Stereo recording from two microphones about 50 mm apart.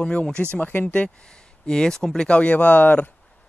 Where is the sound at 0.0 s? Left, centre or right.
Left.